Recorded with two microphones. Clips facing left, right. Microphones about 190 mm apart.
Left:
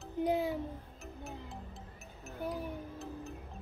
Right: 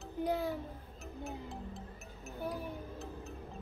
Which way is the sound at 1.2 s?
Centre (ahead or behind).